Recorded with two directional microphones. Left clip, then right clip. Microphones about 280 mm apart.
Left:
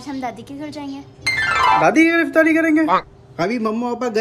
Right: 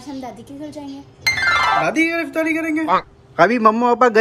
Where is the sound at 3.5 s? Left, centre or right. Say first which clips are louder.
Right 8 dB; centre.